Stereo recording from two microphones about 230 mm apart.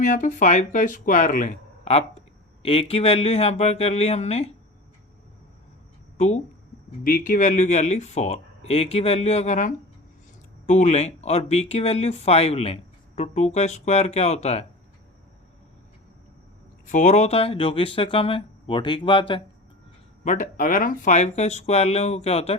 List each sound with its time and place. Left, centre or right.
0.0 s speech: left
6.1 s speech: left
16.8 s speech: left
20.2 s speech: left